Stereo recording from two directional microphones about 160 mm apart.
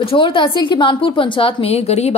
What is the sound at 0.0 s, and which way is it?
A woman's voice, 35° left (ahead or behind).